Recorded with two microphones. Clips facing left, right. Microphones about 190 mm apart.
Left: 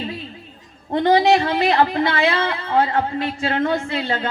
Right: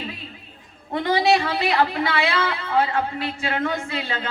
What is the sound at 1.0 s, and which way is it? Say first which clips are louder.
A man's voice: left 4 dB; 40° left (ahead or behind).